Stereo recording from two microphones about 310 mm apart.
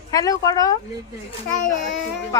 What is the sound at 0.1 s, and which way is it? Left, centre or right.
Speech, centre.